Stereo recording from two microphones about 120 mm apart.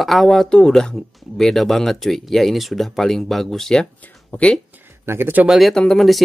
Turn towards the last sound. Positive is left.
turn(degrees=0)  # may be behind; listen again after turning